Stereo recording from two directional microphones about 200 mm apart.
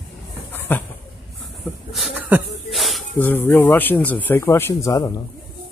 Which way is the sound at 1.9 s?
5° right (ahead or behind).